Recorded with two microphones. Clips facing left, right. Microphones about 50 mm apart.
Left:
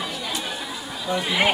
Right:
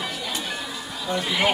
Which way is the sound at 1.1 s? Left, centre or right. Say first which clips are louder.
Left 1 dB; centre.